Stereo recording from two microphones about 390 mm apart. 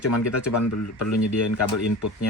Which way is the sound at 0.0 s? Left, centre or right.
Left.